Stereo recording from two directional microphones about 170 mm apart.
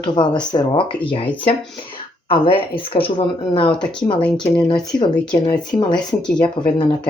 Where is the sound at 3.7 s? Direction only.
5° left (ahead or behind).